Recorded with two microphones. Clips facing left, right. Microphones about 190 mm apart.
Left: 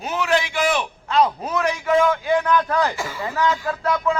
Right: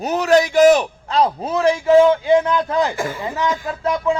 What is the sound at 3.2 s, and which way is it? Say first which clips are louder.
Speech: left 3 dB; 20° right (ahead or behind).